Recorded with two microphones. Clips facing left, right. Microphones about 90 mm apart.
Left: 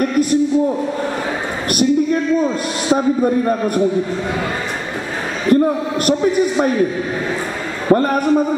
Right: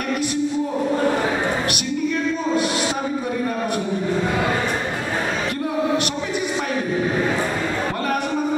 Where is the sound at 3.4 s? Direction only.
45° left (ahead or behind).